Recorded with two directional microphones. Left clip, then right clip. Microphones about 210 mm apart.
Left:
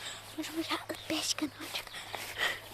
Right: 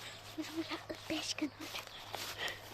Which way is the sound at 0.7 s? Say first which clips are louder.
Left 6 dB; 10° left (ahead or behind).